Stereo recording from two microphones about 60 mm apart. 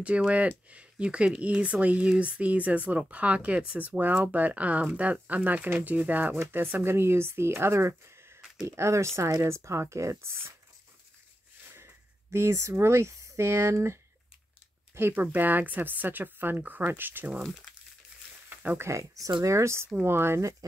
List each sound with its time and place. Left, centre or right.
0.3 s speech: right
11.7 s speech: right
15.0 s speech: right
18.8 s speech: right
20.0 s speech: right